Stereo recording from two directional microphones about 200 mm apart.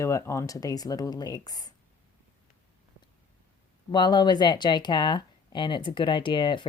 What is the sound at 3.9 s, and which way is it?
Speech, 20° left (ahead or behind).